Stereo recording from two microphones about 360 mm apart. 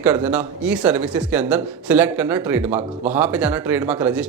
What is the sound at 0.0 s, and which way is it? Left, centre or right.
Speech, centre.